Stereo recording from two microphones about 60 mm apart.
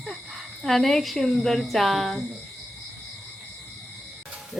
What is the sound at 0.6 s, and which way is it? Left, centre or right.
Speech, centre.